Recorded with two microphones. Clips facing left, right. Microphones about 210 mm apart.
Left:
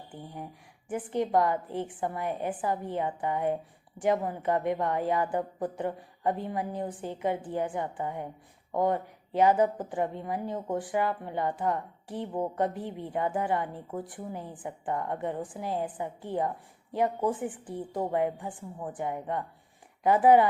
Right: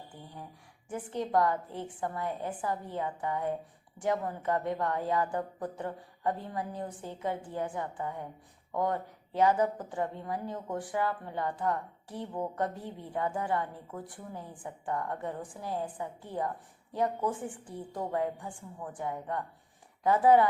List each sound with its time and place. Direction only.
0.9 s a woman's voice: 15° left (ahead or behind)
12.2 s a woman's voice: 25° left (ahead or behind)
17.9 s a woman's voice: 25° left (ahead or behind)